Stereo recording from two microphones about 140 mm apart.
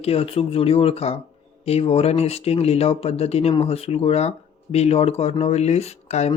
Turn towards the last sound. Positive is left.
turn(degrees=50)  # may be behind; listen again after turning